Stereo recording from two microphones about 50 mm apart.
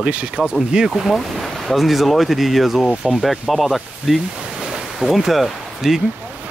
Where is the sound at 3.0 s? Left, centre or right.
Centre.